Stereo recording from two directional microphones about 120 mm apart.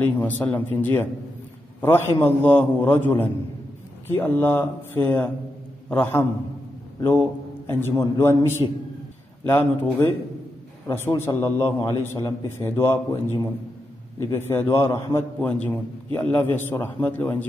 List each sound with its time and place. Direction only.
0.2 s a man's voice: 15° left (ahead or behind)
8.6 s a man's voice: 35° left (ahead or behind)
9.5 s a man's voice: 15° left (ahead or behind)
15.4 s a man's voice: 10° left (ahead or behind)